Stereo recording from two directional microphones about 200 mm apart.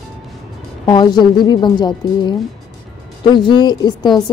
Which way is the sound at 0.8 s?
20° left (ahead or behind).